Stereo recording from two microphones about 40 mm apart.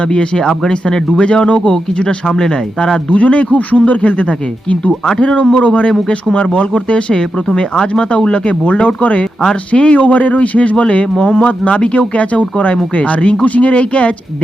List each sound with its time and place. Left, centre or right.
0.1 s speech: centre
3.1 s speech: left
5.9 s speech: centre
6.3 s speech: left
11.4 s speech: left